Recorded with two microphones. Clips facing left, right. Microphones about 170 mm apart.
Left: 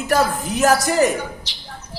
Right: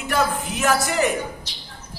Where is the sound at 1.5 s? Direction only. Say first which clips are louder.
Even; 80° left.